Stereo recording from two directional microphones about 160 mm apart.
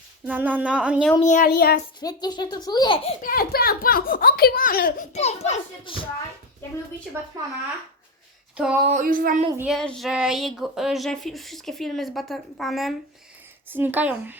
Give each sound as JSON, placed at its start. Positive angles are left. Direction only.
{"t": 0.3, "sound": "speech", "side_deg": -10}
{"t": 1.2, "sound": "speech", "side_deg": 50}
{"t": 1.5, "sound": "a child's voice", "side_deg": 75}
{"t": 2.0, "sound": "a child's voice", "side_deg": 25}
{"t": 3.2, "sound": "a child's voice", "side_deg": 60}
{"t": 5.1, "sound": "a child's voice", "side_deg": 45}
{"t": 8.5, "sound": "a sound", "side_deg": -5}
{"t": 8.8, "sound": "a sound", "side_deg": -50}
{"t": 9.6, "sound": "speech", "side_deg": 0}
{"t": 13.7, "sound": "speech", "side_deg": -10}